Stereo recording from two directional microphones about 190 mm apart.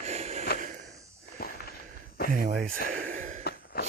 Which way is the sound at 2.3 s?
45° right (ahead or behind).